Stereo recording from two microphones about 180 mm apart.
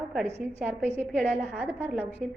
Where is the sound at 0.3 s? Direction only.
40° right (ahead or behind).